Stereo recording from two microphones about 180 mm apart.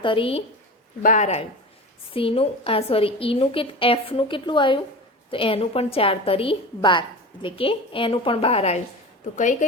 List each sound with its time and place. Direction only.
0.0 s a woman's voice: 30° left (ahead or behind)
1.0 s a woman's voice: 40° left (ahead or behind)
9.3 s a woman's voice: 45° left (ahead or behind)